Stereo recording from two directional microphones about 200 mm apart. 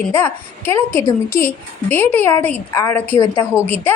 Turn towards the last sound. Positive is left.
turn(degrees=10)  # may be behind; listen again after turning